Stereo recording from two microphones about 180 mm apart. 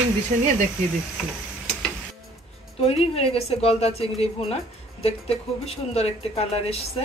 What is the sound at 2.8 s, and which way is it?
A woman's voice, 35° left (ahead or behind).